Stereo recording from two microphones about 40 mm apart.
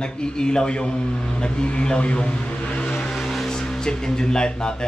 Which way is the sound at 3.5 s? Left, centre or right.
Centre.